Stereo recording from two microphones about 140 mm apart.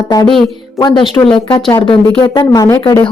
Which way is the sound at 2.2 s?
35° left (ahead or behind).